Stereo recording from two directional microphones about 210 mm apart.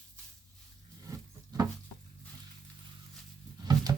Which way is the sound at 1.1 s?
15° right (ahead or behind).